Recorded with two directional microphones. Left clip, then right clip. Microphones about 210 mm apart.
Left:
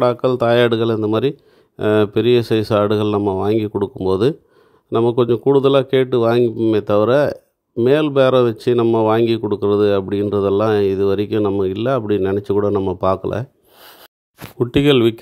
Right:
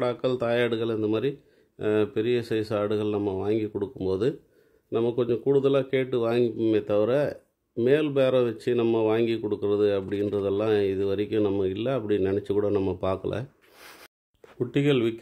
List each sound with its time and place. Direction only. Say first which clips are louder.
0.0 s speech: left 11 dB; 35° left (ahead or behind)
13.7 s snort: left 5 dB; 15° left (ahead or behind)
14.6 s speech: left 10 dB; 40° left (ahead or behind)